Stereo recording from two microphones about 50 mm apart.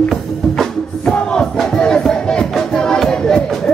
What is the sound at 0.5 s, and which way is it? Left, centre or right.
Music, centre.